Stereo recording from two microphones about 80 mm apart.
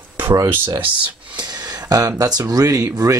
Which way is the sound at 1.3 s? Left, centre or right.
Right.